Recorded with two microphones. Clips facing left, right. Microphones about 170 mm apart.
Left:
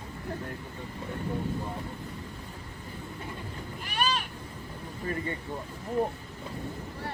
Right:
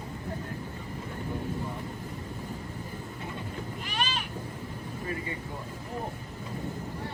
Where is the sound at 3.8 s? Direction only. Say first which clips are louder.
Left 4 dB; 50° left (ahead or behind).